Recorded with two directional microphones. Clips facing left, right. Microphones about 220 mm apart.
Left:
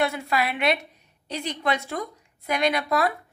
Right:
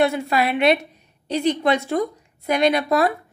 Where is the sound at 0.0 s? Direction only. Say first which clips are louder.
Right 6 dB; 25° right (ahead or behind).